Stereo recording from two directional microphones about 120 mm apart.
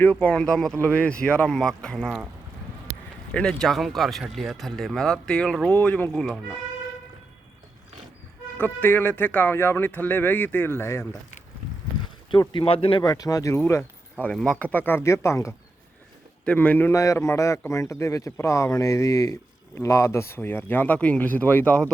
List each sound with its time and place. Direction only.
0.0 s speech: 10° left (ahead or behind)
3.3 s speech: 5° left (ahead or behind)
8.5 s speech: 15° left (ahead or behind)
12.3 s speech: 45° left (ahead or behind)
13.0 s speech: 30° left (ahead or behind)
14.3 s speech: 5° left (ahead or behind); by 15.5 s 25° left (ahead or behind)
16.5 s speech: 15° left (ahead or behind)
16.9 s speech: 25° left (ahead or behind); by 21.9 s 10° left (ahead or behind)